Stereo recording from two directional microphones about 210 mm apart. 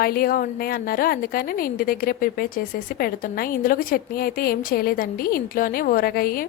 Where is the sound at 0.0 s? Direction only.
45° left (ahead or behind).